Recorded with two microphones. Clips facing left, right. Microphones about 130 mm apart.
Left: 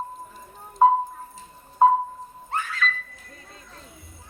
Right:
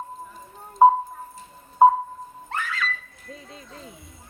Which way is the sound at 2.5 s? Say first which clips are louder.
Left 1 dB; 90° right.